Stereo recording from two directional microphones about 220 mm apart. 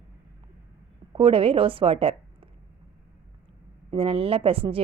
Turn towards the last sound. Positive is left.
turn(degrees=-25)  # may be behind; listen again after turning